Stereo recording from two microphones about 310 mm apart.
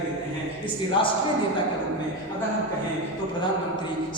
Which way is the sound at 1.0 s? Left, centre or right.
Centre.